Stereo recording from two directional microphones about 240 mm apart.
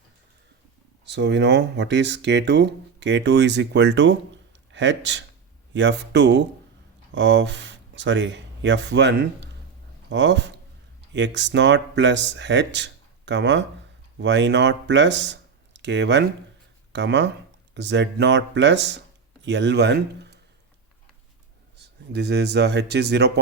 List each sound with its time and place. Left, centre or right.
1.0 s speech: right
21.8 s speech: right